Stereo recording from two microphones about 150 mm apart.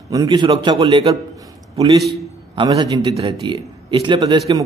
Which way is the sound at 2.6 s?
30° right (ahead or behind).